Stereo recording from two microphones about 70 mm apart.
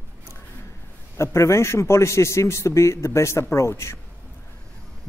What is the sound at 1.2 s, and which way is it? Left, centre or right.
A man's voice, left.